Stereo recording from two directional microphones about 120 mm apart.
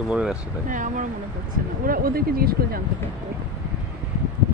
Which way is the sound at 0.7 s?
90° right.